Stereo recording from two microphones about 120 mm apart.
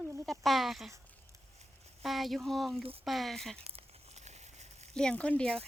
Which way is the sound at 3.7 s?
70° right (ahead or behind).